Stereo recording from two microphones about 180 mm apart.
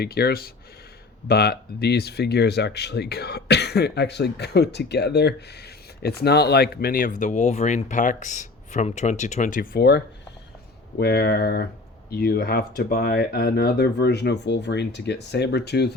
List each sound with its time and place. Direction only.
0.0 s speech: 60° left (ahead or behind)